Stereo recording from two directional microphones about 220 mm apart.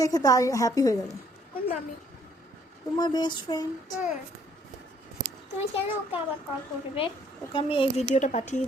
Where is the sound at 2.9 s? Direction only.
20° left (ahead or behind).